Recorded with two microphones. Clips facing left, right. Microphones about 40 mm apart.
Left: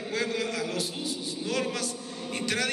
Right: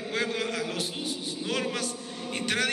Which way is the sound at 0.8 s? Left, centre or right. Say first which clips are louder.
Even; right.